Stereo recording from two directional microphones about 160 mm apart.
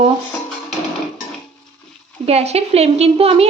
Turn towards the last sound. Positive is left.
turn(degrees=-40)  # may be behind; listen again after turning